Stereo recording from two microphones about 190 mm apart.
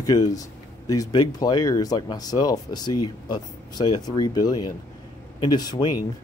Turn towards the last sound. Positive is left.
turn(degrees=20)  # may be behind; listen again after turning